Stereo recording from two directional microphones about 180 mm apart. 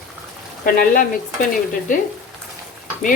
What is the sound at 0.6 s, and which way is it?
Speech, 50° left (ahead or behind).